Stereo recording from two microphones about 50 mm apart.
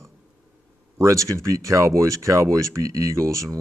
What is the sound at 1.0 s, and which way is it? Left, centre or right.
Speech, right.